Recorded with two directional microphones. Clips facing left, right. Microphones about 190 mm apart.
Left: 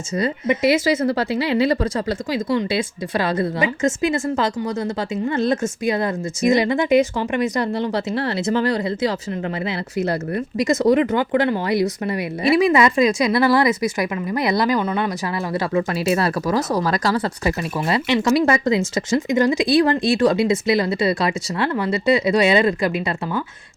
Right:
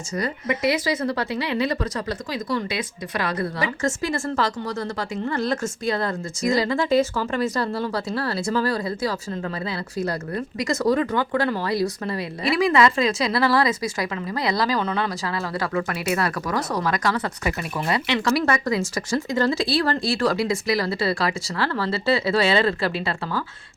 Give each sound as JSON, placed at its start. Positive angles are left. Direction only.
{"t": 0.2, "sound": "speech", "side_deg": 25}
{"t": 15.5, "sound": "speech", "side_deg": 25}